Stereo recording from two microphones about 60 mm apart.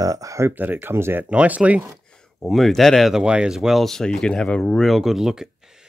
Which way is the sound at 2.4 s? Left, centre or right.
Centre.